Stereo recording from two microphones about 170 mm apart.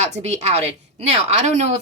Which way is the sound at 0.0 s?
40° right (ahead or behind).